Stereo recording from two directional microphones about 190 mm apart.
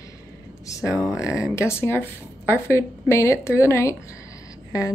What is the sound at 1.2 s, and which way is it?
Speech, 15° left (ahead or behind).